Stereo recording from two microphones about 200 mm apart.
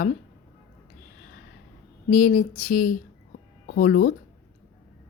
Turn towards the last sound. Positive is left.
turn(degrees=45)  # may be behind; listen again after turning